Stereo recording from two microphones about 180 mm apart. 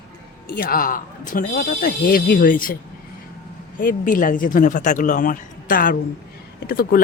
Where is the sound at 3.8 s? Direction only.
50° left (ahead or behind).